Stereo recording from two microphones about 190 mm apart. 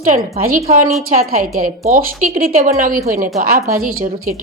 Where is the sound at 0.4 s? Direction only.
45° right (ahead or behind).